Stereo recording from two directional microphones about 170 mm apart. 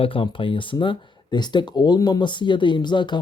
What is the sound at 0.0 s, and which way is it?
Speech, 30° left (ahead or behind).